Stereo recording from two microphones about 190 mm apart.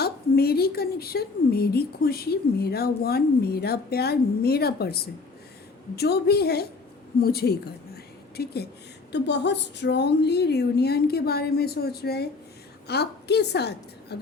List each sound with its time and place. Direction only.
0.0 s a woman's voice: 55° left (ahead or behind)